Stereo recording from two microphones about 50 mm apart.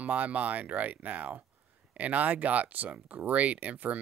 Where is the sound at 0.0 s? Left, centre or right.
Right.